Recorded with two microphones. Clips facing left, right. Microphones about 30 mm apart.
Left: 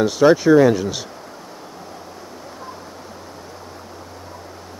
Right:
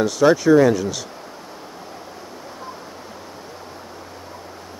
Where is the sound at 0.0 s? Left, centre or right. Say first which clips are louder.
Left 2 dB; centre.